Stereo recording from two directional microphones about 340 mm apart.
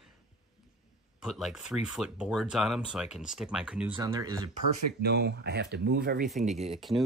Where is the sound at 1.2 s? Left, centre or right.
Centre.